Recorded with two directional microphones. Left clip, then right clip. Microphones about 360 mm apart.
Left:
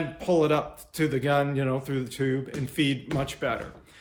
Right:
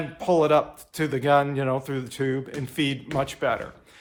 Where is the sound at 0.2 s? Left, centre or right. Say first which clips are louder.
Right 4 dB; centre.